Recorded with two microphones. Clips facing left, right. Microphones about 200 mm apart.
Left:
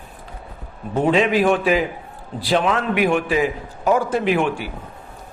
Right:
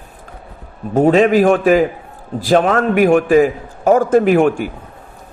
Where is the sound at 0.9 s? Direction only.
45° right (ahead or behind).